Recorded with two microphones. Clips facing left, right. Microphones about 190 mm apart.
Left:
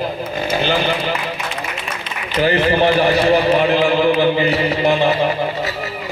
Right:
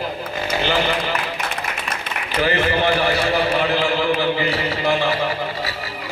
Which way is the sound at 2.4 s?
25° left (ahead or behind).